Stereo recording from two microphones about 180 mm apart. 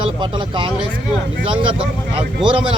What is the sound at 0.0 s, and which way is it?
Speech, 25° right (ahead or behind).